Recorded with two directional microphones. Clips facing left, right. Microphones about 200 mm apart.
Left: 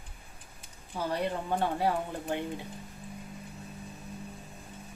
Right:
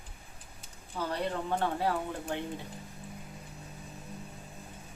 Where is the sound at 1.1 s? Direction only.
15° left (ahead or behind).